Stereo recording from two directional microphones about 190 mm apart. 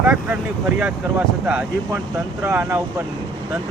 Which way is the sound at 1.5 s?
5° right (ahead or behind).